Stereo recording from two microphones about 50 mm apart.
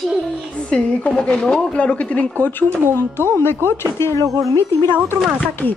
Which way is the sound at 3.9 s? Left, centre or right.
Left.